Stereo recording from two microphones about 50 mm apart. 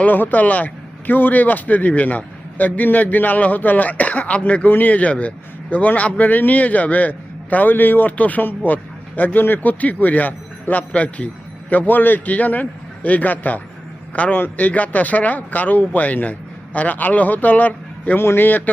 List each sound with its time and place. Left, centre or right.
0.0 s a man's voice: left
18.2 s a man's voice: left